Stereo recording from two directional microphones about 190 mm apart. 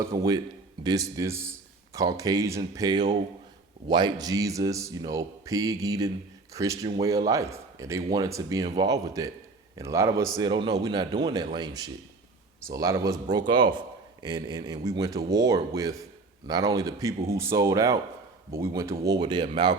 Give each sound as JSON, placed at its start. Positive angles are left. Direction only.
{"t": 0.0, "sound": "speech", "side_deg": -20}